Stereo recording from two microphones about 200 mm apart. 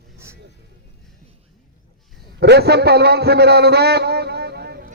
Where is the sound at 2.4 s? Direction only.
55° right (ahead or behind).